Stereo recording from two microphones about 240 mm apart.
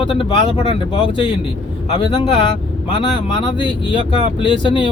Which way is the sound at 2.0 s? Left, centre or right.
Left.